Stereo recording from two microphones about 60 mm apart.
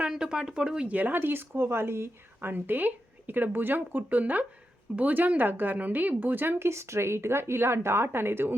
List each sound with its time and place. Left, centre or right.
0.0 s speech: centre
0.9 s speech: right